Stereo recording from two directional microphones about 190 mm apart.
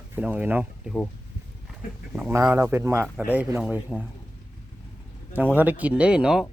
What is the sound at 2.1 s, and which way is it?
Speech, 10° right (ahead or behind).